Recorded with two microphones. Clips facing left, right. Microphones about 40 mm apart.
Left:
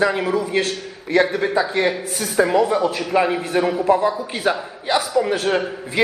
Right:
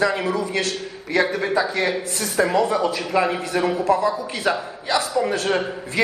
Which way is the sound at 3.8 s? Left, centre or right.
Left.